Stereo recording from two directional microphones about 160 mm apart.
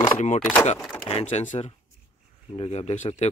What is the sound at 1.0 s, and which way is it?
Speech, 40° left (ahead or behind).